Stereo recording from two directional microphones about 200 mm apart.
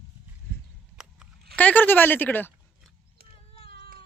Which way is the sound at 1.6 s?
10° left (ahead or behind).